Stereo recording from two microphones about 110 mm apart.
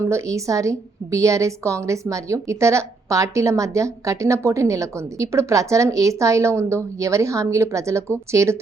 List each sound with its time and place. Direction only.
0.1 s a woman's voice: 25° right (ahead or behind)